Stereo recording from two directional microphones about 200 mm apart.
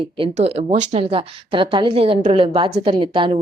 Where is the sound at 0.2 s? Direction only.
30° right (ahead or behind).